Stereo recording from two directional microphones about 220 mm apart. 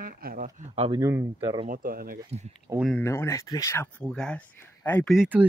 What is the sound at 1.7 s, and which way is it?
Speech, 40° right (ahead or behind).